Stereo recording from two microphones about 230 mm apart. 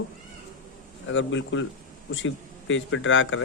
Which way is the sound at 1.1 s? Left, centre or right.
Left.